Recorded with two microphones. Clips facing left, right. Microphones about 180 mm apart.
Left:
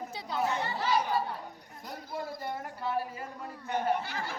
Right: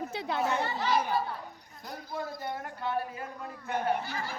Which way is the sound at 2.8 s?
5° left (ahead or behind).